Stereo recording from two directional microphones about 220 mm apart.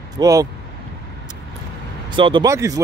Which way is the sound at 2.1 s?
20° right (ahead or behind).